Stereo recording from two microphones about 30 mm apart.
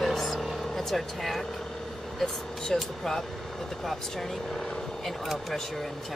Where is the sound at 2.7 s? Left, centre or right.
Centre.